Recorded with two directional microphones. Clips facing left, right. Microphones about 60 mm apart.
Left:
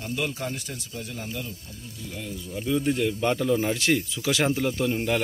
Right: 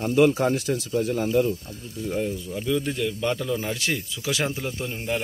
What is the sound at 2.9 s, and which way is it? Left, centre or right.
Speech, left.